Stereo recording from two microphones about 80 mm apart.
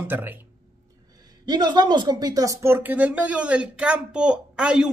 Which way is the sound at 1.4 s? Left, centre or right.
Right.